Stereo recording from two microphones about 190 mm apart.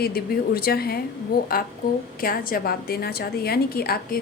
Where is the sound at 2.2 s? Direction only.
50° left (ahead or behind).